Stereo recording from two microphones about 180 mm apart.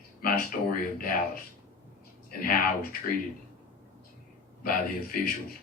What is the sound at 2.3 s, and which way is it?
Speech, 50° left (ahead or behind).